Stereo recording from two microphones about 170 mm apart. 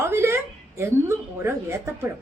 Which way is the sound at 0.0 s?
15° right (ahead or behind).